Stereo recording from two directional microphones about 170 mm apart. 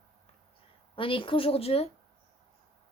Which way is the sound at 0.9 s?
30° left (ahead or behind).